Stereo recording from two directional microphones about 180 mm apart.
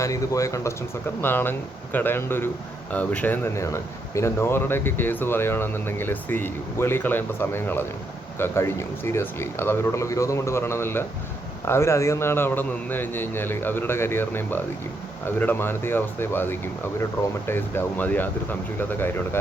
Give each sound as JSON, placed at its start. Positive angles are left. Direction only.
{"t": 0.0, "sound": "speech", "side_deg": 20}